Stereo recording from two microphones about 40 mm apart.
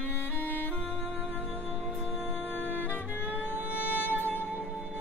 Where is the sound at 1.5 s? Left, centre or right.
Right.